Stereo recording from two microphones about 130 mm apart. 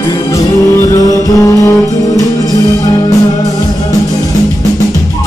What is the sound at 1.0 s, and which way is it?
Music, 25° left (ahead or behind).